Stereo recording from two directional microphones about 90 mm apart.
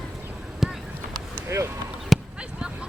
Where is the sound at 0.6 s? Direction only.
5° right (ahead or behind).